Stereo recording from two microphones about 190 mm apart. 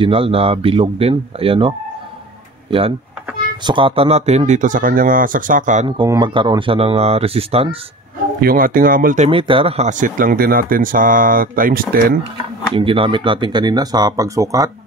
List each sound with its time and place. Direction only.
0.0 s speech: 30° right (ahead or behind)
3.6 s speech: 25° right (ahead or behind); by 5.9 s 40° right (ahead or behind)
5.9 s speech: 20° right (ahead or behind)
8.4 s speech: 50° right (ahead or behind)
9.3 s speech: 25° right (ahead or behind); by 12.2 s 50° right (ahead or behind)
12.7 s speech: 30° right (ahead or behind)